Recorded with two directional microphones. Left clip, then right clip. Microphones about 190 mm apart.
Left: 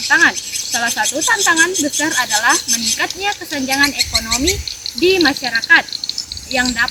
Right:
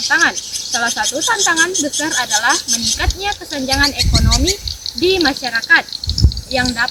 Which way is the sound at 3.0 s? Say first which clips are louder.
Left 1 dB; centre (ahead or behind).